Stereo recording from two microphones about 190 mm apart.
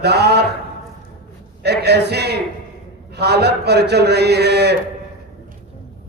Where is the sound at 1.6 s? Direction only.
60° right (ahead or behind).